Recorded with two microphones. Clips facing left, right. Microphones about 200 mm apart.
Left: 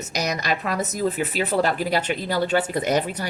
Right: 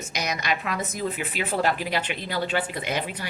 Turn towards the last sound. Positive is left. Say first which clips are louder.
# left 7 dB
turn(degrees=40)  # may be behind; listen again after turning